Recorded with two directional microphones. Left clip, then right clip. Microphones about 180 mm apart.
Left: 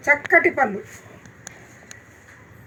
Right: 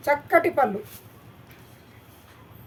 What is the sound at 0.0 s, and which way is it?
Speech, 45° right (ahead or behind).